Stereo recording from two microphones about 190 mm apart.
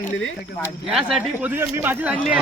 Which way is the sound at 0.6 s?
5° right (ahead or behind).